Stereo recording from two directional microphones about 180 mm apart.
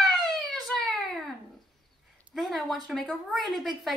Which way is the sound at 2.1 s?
Centre (ahead or behind).